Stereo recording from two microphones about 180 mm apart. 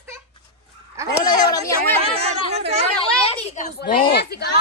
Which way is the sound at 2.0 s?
35° right (ahead or behind).